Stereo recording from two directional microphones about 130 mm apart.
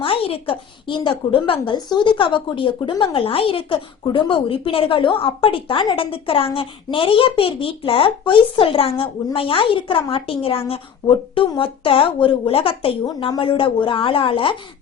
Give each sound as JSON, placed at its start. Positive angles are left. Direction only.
{"t": 0.0, "sound": "a woman's voice", "side_deg": 45}